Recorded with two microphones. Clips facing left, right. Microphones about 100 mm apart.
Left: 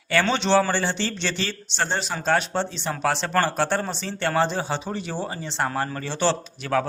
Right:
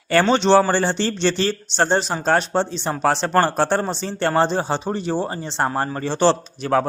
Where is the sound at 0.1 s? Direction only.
40° right (ahead or behind).